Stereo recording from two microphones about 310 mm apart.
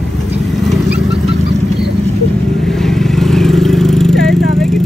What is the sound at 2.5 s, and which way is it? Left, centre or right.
Vehicle, centre.